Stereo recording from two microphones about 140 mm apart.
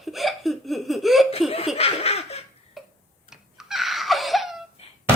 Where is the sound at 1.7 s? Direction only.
45° left (ahead or behind).